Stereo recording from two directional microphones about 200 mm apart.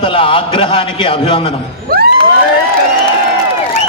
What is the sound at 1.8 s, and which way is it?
Children shouting, 50° right (ahead or behind).